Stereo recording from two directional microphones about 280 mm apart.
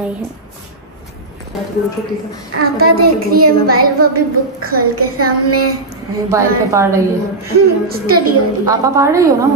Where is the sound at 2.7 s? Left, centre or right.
Right.